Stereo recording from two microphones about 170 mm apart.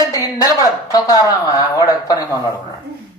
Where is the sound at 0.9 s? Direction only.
20° left (ahead or behind).